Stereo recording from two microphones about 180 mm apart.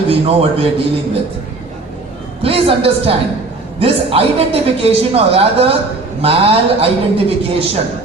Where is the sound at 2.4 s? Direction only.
35° right (ahead or behind).